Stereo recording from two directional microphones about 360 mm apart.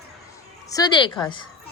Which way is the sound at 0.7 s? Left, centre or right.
Centre.